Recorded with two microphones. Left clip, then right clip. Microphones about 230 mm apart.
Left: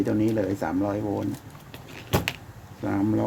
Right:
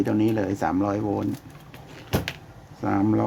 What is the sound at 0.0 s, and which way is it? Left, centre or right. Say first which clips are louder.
Speech: right 1 dB; right.